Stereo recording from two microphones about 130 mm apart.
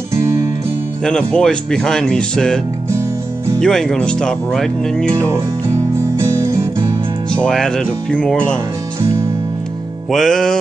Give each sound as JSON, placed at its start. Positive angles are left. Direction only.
{"t": 1.0, "sound": "speech", "side_deg": 5}
{"t": 5.3, "sound": "music", "side_deg": -25}
{"t": 7.3, "sound": "speech", "side_deg": 5}
{"t": 10.1, "sound": "speech", "side_deg": 5}